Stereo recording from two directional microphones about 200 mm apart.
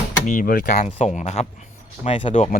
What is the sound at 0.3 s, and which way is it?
Speech, 45° left (ahead or behind).